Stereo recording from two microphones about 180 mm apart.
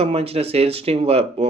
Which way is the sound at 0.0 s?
35° right (ahead or behind).